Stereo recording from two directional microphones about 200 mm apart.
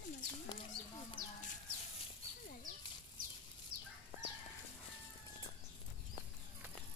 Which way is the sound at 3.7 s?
45° right (ahead or behind).